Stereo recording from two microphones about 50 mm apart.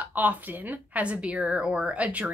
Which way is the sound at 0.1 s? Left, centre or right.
Right.